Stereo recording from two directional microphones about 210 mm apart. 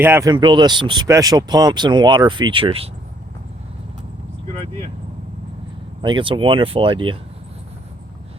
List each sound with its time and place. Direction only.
0.0 s speech: 10° right (ahead or behind)
6.0 s speech: 20° right (ahead or behind)